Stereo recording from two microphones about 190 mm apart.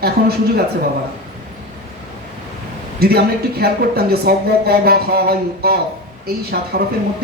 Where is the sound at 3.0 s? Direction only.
55° right (ahead or behind).